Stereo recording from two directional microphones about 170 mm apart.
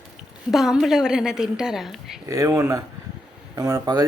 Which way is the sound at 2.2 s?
20° right (ahead or behind).